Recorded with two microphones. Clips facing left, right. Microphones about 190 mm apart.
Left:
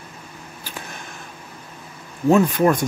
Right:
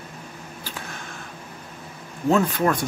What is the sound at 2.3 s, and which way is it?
Speech, 15° left (ahead or behind).